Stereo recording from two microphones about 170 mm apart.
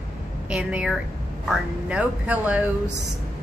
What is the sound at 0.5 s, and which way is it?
Speech, 5° right (ahead or behind).